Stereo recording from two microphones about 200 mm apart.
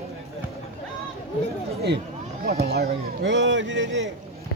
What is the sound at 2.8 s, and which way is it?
Speech, 55° right (ahead or behind).